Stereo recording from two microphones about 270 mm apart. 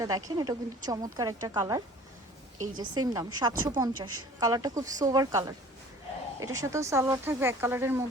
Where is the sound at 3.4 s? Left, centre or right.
Centre.